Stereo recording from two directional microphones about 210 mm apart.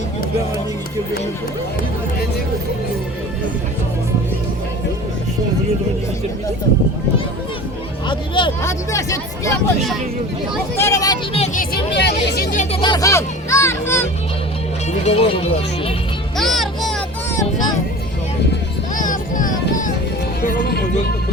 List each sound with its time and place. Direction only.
8.0 s speech: 25° left (ahead or behind)
10.8 s speech: 15° left (ahead or behind)
11.3 s vehicle: 35° left (ahead or behind)
11.9 s speech: 55° left (ahead or behind)
12.7 s speech: 20° left (ahead or behind)
15.0 s speech: 30° left (ahead or behind)
16.4 s music: centre (ahead or behind)
18.9 s vehicle: 40° left (ahead or behind)
20.6 s music: 50° left (ahead or behind)